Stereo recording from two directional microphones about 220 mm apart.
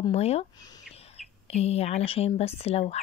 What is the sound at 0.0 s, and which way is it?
Speech, 30° left (ahead or behind).